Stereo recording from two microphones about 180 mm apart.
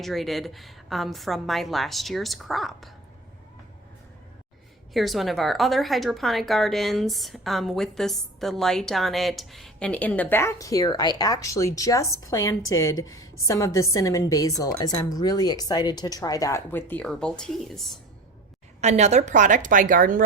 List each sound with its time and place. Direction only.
0.0 s a woman's voice: centre (ahead or behind)
4.9 s a woman's voice: centre (ahead or behind)
18.8 s a woman's voice: 40° right (ahead or behind)